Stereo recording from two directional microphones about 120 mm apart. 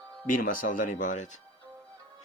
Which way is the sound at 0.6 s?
90° left.